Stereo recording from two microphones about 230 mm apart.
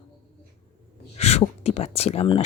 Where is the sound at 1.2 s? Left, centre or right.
Left.